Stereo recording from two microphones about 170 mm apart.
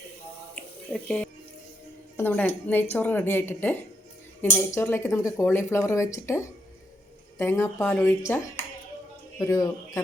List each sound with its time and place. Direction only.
0.5 s a sound: 5° left (ahead or behind)
2.1 s speech: 10° left (ahead or behind)
9.4 s speech: 20° left (ahead or behind)